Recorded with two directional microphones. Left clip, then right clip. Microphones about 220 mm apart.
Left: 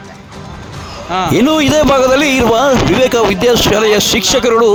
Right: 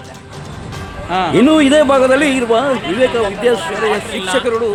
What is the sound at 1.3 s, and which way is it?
A man's voice, 45° left (ahead or behind).